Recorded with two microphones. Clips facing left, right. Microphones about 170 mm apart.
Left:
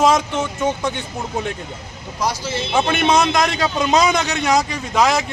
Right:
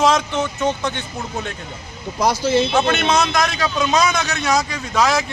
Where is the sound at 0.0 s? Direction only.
10° left (ahead or behind).